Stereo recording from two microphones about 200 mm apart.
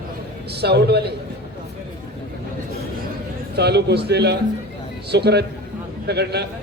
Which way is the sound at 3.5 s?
55° right (ahead or behind).